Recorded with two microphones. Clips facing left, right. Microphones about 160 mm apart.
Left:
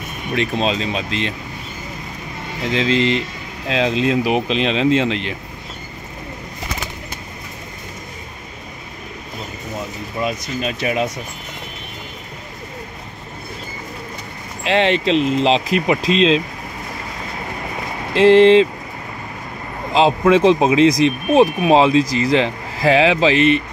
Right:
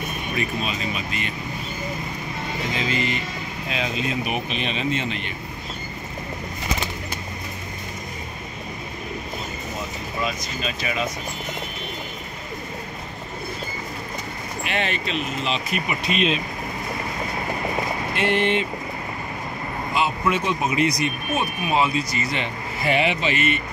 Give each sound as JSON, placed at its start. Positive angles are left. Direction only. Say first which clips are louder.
{"t": 0.3, "sound": "speech", "louder": "left 9 dB", "side_deg": 90}
{"t": 2.7, "sound": "speech", "louder": "left 10 dB", "side_deg": 90}
{"t": 10.2, "sound": "speech", "louder": "left 6 dB", "side_deg": 65}
{"t": 14.6, "sound": "speech", "louder": "left 10 dB", "side_deg": 90}
{"t": 18.1, "sound": "speech", "louder": "left 13 dB", "side_deg": 90}
{"t": 19.9, "sound": "speech", "louder": "left 10 dB", "side_deg": 90}